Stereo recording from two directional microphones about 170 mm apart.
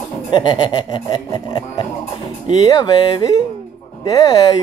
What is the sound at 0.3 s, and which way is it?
Speech, 30° left (ahead or behind).